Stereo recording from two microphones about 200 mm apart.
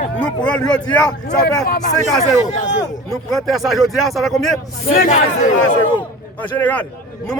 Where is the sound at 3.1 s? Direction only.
Centre (ahead or behind).